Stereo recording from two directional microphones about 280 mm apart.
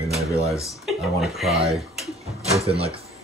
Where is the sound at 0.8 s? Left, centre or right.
Centre.